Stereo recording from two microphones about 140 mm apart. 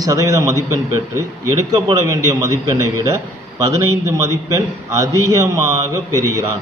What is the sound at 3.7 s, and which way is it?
A man's voice, 20° right (ahead or behind).